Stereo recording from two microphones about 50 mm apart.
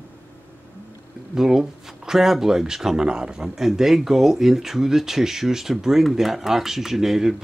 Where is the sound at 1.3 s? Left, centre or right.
Centre.